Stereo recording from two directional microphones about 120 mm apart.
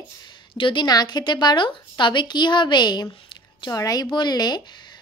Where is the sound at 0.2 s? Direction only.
40° left (ahead or behind).